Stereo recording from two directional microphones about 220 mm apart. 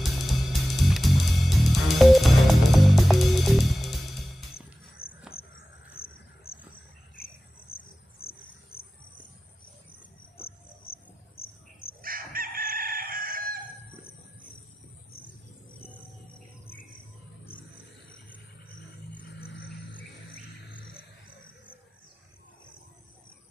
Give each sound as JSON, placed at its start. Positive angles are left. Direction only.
{"t": 0.3, "sound": "music", "side_deg": 0}
{"t": 5.9, "sound": "cricket", "side_deg": 45}
{"t": 7.7, "sound": "cricket", "side_deg": 45}
{"t": 11.4, "sound": "cricket", "side_deg": 70}
{"t": 12.0, "sound": "chicken", "side_deg": -40}